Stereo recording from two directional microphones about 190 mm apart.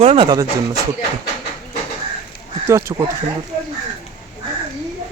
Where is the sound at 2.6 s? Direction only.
15° right (ahead or behind).